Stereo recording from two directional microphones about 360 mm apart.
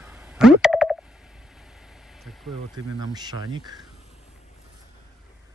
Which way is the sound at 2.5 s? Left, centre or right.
Centre.